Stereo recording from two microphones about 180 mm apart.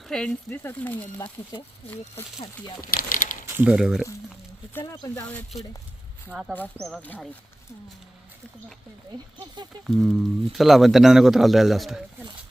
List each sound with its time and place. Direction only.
0.1 s speech: 5° left (ahead or behind)
2.8 s speech: 50° left (ahead or behind)
3.6 s speech: 5° right (ahead or behind)
4.8 s speech: 20° left (ahead or behind)
6.3 s speech: 5° right (ahead or behind)
9.8 s speech: centre (ahead or behind)